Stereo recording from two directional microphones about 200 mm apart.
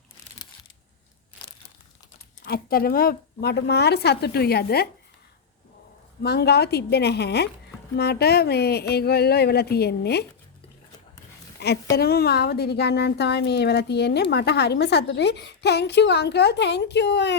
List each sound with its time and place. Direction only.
2.5 s speech: 50° left (ahead or behind)
6.2 s speech: 55° left (ahead or behind)
11.6 s a woman's voice: 55° left (ahead or behind)